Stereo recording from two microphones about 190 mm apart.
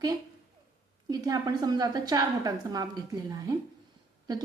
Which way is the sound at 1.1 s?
20° right (ahead or behind).